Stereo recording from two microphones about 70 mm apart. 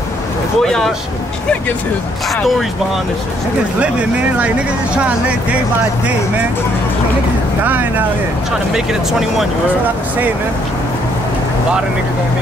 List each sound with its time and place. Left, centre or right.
0.6 s speech: centre
4.9 s speech: centre
7.6 s speech: right